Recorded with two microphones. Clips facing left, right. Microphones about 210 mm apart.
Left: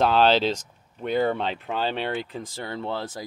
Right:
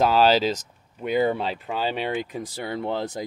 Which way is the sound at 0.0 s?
5° right (ahead or behind).